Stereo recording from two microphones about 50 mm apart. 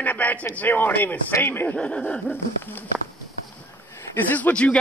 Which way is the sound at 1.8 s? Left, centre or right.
Left.